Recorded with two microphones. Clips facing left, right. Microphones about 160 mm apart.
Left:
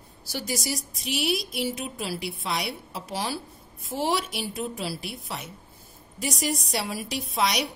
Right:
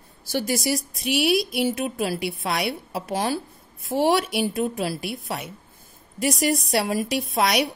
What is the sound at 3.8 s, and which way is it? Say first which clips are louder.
A woman's voice: right 6 dB; 65° right (ahead or behind).